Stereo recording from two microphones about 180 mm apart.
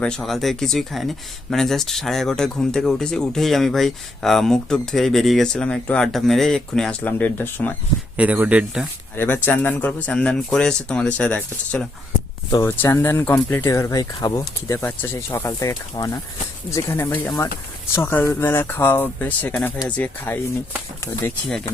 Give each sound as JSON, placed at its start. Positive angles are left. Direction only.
{"t": 0.0, "sound": "speech", "side_deg": 5}
{"t": 8.1, "sound": "speech", "side_deg": -10}
{"t": 9.1, "sound": "speech", "side_deg": 10}